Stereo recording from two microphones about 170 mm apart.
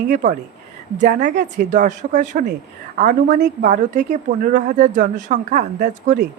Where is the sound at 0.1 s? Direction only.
50° right (ahead or behind).